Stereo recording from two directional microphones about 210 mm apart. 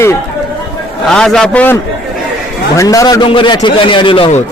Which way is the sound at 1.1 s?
5° left (ahead or behind).